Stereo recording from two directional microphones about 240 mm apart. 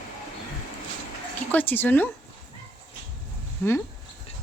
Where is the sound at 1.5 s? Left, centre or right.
Centre.